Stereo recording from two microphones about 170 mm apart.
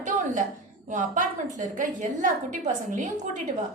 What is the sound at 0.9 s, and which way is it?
A woman's voice, 50° right (ahead or behind).